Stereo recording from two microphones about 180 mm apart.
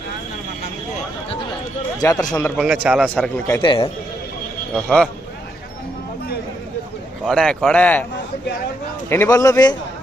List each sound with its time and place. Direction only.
2.0 s a man's voice: 20° left (ahead or behind)
2.8 s a man's voice: 10° right (ahead or behind)
3.2 s a man's voice: 10° left (ahead or behind)
3.5 s a man's voice: 25° left (ahead or behind)
4.7 s speech: 5° left (ahead or behind)
7.3 s a man's voice: 5° left (ahead or behind)
9.0 s a man's voice: 15° left (ahead or behind)